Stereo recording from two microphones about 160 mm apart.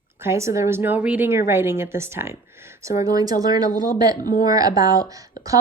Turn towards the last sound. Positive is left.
turn(degrees=-20)  # may be behind; listen again after turning